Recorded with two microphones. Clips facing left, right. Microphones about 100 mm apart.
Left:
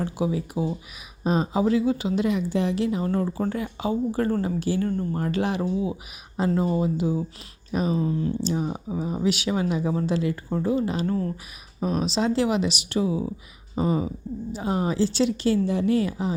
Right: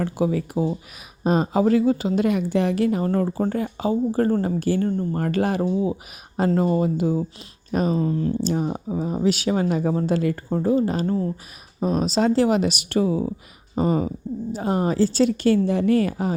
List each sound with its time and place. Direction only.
0.0 s a woman's voice: 55° right (ahead or behind)
4.8 s speech: 25° right (ahead or behind)
5.1 s a woman's voice: 50° right (ahead or behind)
6.3 s a woman's voice: 55° right (ahead or behind)
8.7 s a woman's voice: 35° right (ahead or behind); by 16.3 s 55° right (ahead or behind)